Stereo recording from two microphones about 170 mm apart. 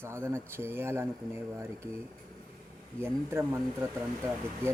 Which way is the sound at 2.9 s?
15° right (ahead or behind).